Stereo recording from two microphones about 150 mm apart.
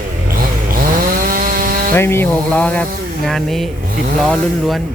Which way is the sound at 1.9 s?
15° left (ahead or behind).